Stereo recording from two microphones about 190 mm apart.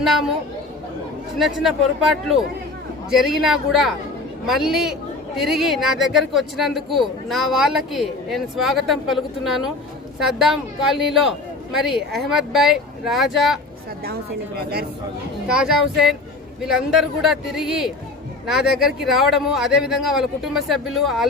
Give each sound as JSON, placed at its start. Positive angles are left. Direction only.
{"t": 1.4, "sound": "speech", "side_deg": 0}
{"t": 14.0, "sound": "a woman's voice", "side_deg": -55}
{"t": 15.5, "sound": "speech", "side_deg": 0}